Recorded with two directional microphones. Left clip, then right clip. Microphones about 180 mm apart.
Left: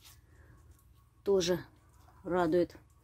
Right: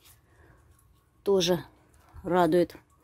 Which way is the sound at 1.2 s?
25° right (ahead or behind).